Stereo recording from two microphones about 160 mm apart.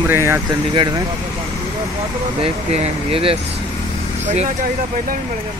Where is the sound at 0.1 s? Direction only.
15° right (ahead or behind).